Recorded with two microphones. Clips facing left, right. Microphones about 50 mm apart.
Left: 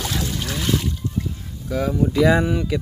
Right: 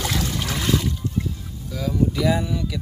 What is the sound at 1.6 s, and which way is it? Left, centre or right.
Speech, left.